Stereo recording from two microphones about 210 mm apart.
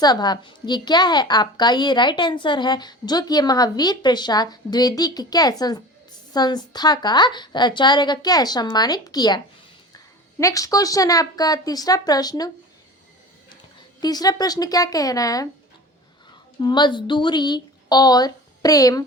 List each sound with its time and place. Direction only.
0.0 s a woman's voice: 20° left (ahead or behind)
14.0 s a woman's voice: 20° left (ahead or behind)
16.6 s a woman's voice: 20° left (ahead or behind)